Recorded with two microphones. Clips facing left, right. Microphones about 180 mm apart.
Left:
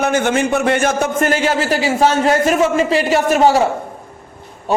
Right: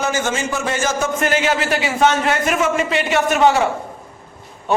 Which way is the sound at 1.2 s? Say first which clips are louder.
Left 1 dB; 35° left (ahead or behind).